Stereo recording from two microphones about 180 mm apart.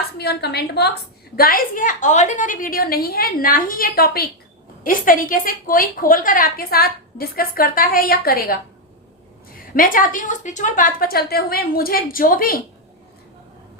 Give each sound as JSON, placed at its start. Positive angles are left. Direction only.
{"t": 0.2, "sound": "a woman's voice", "side_deg": 65}
{"t": 1.4, "sound": "a woman's voice", "side_deg": 55}
{"t": 9.7, "sound": "a woman's voice", "side_deg": 50}